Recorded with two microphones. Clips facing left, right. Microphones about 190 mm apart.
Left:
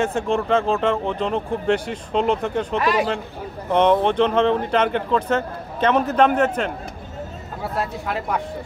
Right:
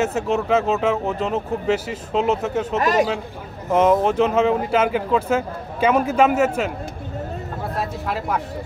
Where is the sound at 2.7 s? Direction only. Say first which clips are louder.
Right 2 dB; 45° right (ahead or behind).